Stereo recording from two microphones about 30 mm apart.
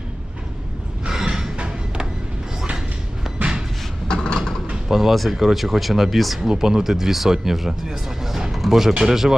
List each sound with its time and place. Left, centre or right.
1.0 s a sound: right
1.5 s music: right
4.1 s a sound: left
4.7 s pigeon: centre
5.1 s speech: centre
6.5 s speech: right